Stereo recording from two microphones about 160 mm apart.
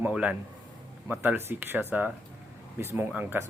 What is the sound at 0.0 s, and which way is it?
A man's voice, 10° right (ahead or behind).